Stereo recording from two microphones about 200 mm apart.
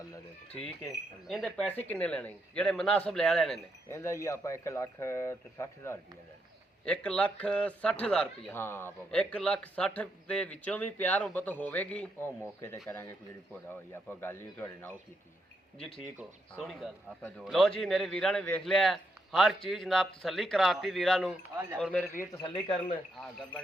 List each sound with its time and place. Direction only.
0.5 s a man's voice: 5° left (ahead or behind)
3.8 s speech: 15° left (ahead or behind)
14.1 s speech: 10° left (ahead or behind)
16.1 s a man's voice: centre (ahead or behind)
22.3 s speech: 20° left (ahead or behind)